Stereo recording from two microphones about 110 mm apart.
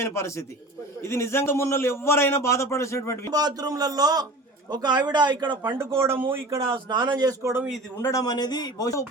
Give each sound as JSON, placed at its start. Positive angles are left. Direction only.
{"t": 0.0, "sound": "a man's voice", "side_deg": 25}
{"t": 3.3, "sound": "a man's voice", "side_deg": -35}
{"t": 5.6, "sound": "speech", "side_deg": -20}
{"t": 6.6, "sound": "speech", "side_deg": -45}
{"t": 8.0, "sound": "speech", "side_deg": 30}